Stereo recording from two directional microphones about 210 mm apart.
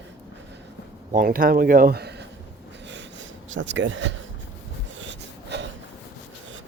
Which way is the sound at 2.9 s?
60° right (ahead or behind).